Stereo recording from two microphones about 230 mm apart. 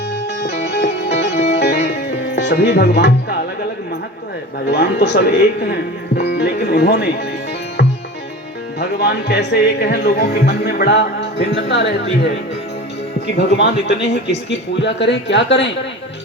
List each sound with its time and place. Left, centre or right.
0.4 s music: left
1.3 s music: left
1.5 s music: left
4.6 s speech: left
8.8 s speech: left
13.2 s speech: left